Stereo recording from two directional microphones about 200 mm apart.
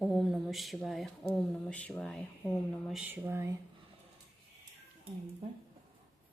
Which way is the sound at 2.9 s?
10° right (ahead or behind).